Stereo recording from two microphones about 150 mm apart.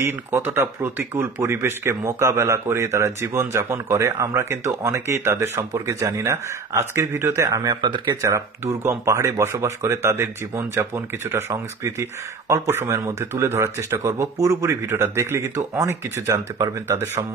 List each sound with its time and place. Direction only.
0.0 s speech: 15° right (ahead or behind)
7.8 s speech: 30° right (ahead or behind); by 17.2 s 15° right (ahead or behind)